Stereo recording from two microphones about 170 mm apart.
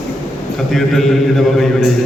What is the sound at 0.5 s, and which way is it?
A man's voice, centre (ahead or behind).